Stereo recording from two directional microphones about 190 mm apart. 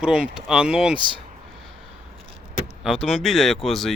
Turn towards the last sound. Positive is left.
turn(degrees=0)  # may be behind; listen again after turning